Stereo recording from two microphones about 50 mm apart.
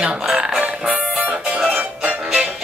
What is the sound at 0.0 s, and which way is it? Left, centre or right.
Music, centre.